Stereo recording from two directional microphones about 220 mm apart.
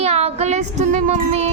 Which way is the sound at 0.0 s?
30° right (ahead or behind).